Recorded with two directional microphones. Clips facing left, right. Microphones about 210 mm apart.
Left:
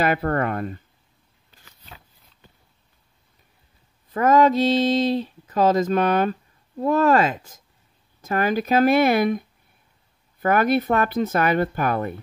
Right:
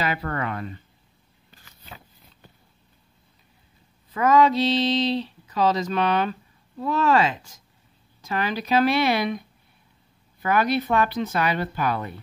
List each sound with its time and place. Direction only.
0.0 s speech: 50° left (ahead or behind)
4.1 s speech: 50° left (ahead or behind)
10.4 s speech: 50° left (ahead or behind)